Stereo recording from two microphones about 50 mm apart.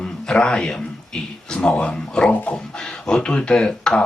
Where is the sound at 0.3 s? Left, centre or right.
Centre.